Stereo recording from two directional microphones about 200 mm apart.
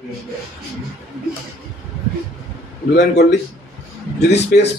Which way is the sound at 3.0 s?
60° left (ahead or behind).